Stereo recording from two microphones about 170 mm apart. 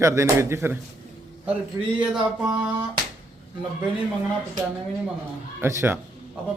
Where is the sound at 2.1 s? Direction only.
5° right (ahead or behind).